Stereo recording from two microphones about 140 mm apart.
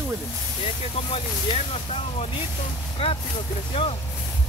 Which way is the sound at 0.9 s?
45° left (ahead or behind).